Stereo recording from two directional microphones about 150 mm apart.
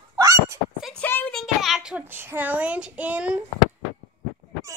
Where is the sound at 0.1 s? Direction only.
20° right (ahead or behind).